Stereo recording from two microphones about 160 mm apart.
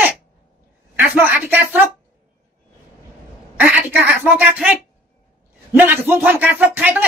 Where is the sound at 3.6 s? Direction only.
10° right (ahead or behind).